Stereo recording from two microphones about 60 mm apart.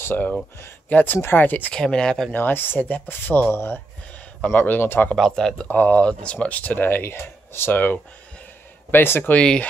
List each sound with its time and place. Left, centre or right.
0.0 s speech: left
1.7 s speech: centre
2.3 s speech: left
5.1 s speech: centre
5.7 s speech: left